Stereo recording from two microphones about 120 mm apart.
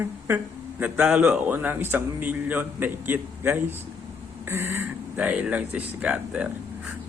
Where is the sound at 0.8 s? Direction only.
10° right (ahead or behind).